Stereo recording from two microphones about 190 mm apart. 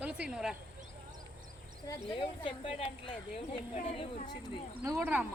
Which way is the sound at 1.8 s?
25° left (ahead or behind).